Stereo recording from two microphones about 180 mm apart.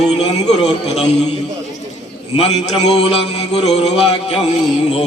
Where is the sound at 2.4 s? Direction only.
35° left (ahead or behind).